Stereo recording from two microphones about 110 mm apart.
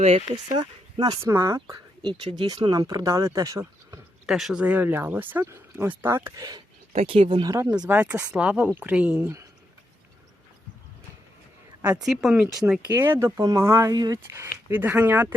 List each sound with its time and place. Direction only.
0.5 s speech: 40° right (ahead or behind)
1.2 s speech: 25° right (ahead or behind)
4.3 s speech: 5° right (ahead or behind)
4.6 s speech: 15° right (ahead or behind)
6.3 s speech: 35° right (ahead or behind)
6.9 s speech: 65° right (ahead or behind)
7.3 s speech: 45° right (ahead or behind)
7.5 s speech: 20° right (ahead or behind)
12.0 s speech: 5° right (ahead or behind)
12.9 s speech: 20° right (ahead or behind)
13.9 s speech: 35° right (ahead or behind)
14.3 s speech: 20° right (ahead or behind)